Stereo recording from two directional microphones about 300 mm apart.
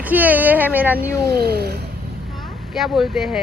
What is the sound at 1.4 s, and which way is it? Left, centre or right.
Speech, right.